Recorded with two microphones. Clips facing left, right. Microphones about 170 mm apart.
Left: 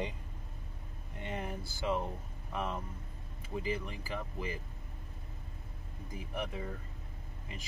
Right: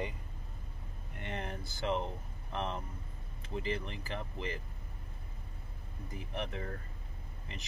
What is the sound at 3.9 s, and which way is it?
Speech, 10° left (ahead or behind).